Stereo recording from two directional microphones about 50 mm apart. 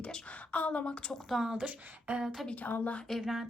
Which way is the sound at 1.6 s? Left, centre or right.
Right.